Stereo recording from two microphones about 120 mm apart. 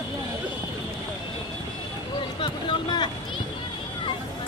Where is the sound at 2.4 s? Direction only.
45° left (ahead or behind).